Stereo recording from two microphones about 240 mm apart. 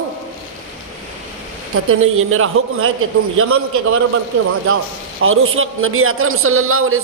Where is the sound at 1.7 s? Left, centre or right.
Right.